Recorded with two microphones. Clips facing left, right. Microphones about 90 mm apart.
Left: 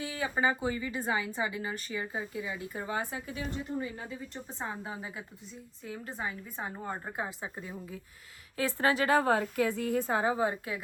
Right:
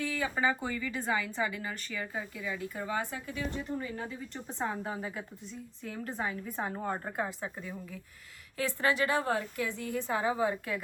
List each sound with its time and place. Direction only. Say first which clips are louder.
0.0 s a woman's voice: even; 15° left (ahead or behind)
8.5 s a woman's voice: left 1 dB; 35° left (ahead or behind)
9.2 s a woman's voice: left 5 dB; 60° left (ahead or behind); by 10.2 s 45° left (ahead or behind)
10.3 s speech: even; 15° left (ahead or behind)